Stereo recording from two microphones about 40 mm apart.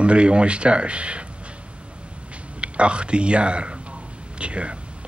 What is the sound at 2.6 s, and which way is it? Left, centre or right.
Speech, right.